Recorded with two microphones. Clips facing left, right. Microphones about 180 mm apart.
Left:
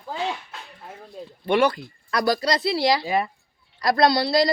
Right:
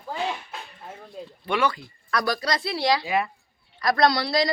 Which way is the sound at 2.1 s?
35° left (ahead or behind).